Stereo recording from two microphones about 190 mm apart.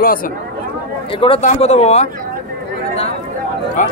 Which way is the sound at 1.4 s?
35° left (ahead or behind).